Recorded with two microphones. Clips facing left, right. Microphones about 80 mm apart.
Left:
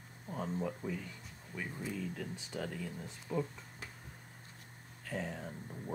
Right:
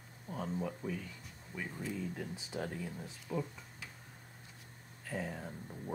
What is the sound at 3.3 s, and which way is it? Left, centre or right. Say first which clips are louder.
Speech: left 2 dB; centre.